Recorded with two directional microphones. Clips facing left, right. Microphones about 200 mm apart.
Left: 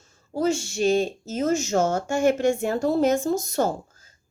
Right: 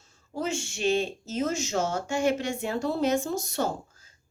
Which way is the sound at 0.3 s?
40° left (ahead or behind).